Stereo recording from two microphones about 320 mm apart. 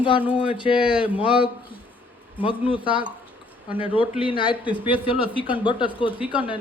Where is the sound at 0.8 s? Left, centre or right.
Centre.